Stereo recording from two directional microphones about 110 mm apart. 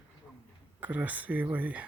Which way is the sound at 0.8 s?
15° right (ahead or behind).